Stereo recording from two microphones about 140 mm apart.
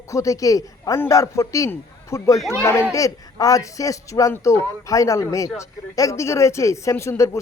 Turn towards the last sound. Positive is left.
turn(degrees=20)  # may be behind; listen again after turning